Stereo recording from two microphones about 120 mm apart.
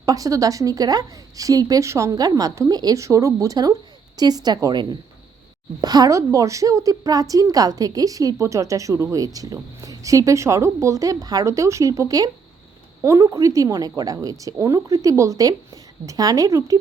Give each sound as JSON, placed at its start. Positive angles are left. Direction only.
{"t": 0.0, "sound": "a woman's voice", "side_deg": -30}